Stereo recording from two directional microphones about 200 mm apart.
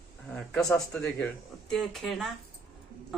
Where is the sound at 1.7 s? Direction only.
Centre (ahead or behind).